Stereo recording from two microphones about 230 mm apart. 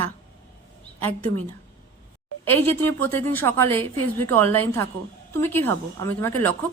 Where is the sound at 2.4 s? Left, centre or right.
Centre.